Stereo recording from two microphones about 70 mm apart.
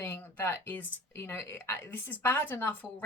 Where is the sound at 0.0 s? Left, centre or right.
Left.